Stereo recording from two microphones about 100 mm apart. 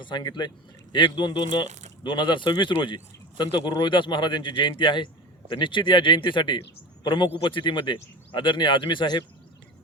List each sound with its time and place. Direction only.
0.0 s a man's voice: 50° left (ahead or behind)